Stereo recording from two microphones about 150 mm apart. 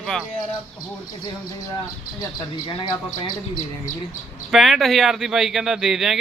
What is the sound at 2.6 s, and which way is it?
Speech, 35° left (ahead or behind).